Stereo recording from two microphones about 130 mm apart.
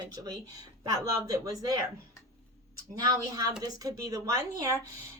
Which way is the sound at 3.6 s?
30° right (ahead or behind).